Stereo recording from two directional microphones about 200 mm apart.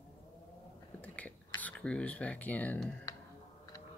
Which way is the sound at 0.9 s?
5° left (ahead or behind).